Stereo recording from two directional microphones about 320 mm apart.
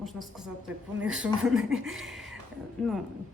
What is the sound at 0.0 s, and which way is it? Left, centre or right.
Speech, centre.